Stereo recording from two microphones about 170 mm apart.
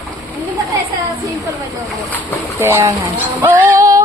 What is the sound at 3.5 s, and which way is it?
Female singing, 15° right (ahead or behind).